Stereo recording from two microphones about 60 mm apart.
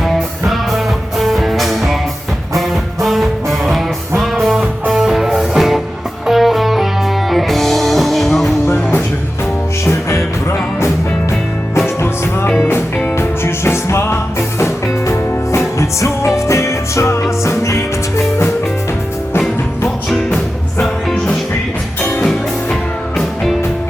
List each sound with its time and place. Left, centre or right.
0.0 s music: centre
8.6 s music: left
13.1 s music: left
22.2 s music: centre